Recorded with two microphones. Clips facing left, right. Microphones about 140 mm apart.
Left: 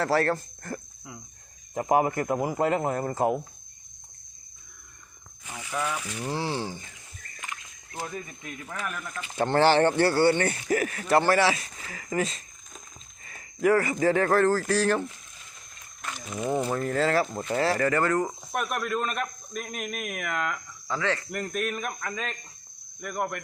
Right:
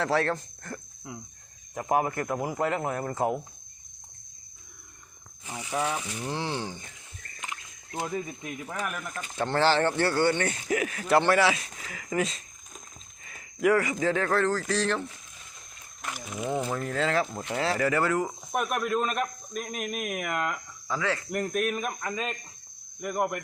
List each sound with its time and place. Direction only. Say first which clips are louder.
0.0 s speech: left 2 dB; centre (ahead or behind)
1.9 s speech: left 3 dB; 10° left (ahead or behind)
5.5 s speech: right 1 dB; 20° right (ahead or behind)
6.1 s speech: left 2 dB; 10° left (ahead or behind)
7.4 s speech: right 1 dB; 20° right (ahead or behind)
9.4 s speech: left 3 dB; 15° left (ahead or behind)
10.7 s speech: even; centre (ahead or behind)
14.0 s speech: left 4 dB; 10° left (ahead or behind)
16.0 s a sound: left 1 dB; 10° right (ahead or behind)
16.5 s speech: left 3 dB; 5° left (ahead or behind)
20.8 s cricket: left 1 dB; 5° right (ahead or behind)
21.3 s speech: right 2 dB; 10° right (ahead or behind)